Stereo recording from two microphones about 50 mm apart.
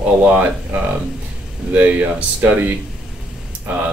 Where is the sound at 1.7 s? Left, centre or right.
Right.